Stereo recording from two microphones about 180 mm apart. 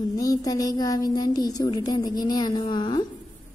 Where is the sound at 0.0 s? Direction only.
20° left (ahead or behind).